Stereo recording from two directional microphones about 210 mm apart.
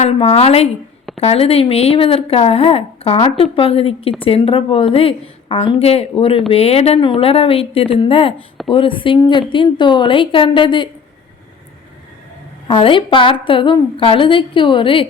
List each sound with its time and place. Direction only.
0.0 s speech: 30° left (ahead or behind)
12.6 s speech: 25° left (ahead or behind)